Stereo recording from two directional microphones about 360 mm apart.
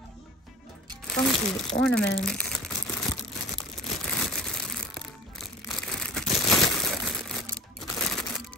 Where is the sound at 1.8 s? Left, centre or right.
Centre.